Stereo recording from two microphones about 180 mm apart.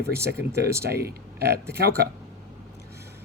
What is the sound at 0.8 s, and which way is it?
Speech, 60° right (ahead or behind).